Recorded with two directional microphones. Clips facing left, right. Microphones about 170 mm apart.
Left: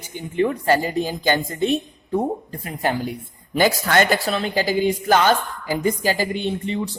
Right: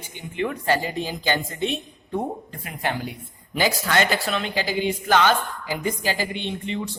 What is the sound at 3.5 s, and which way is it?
A woman's voice, 50° left (ahead or behind).